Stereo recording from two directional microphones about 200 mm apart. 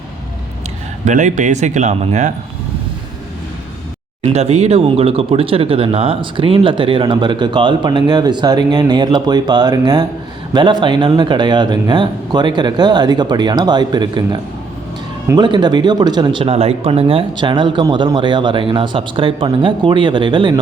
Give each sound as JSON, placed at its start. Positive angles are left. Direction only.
{"t": 1.0, "sound": "speech", "side_deg": -40}
{"t": 4.2, "sound": "speech", "side_deg": -30}
{"t": 15.3, "sound": "speech", "side_deg": -20}